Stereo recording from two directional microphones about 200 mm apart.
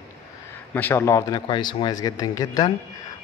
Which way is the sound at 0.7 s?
10° left (ahead or behind).